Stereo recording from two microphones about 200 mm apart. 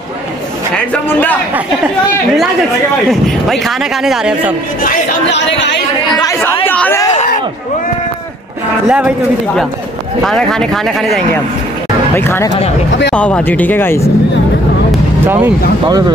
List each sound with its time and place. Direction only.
0.9 s a sound: 10° left (ahead or behind)
3.1 s a man's voice: centre (ahead or behind)
5.3 s speech: 60° left (ahead or behind)
6.1 s chatter: 20° left (ahead or behind)
8.8 s a man's voice: 5° right (ahead or behind)
10.2 s a man's voice: centre (ahead or behind)
12.2 s speech: 10° left (ahead or behind)
14.9 s speech: 10° right (ahead or behind)